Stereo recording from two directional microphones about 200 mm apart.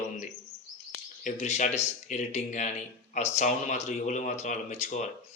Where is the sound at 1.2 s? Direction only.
35° left (ahead or behind).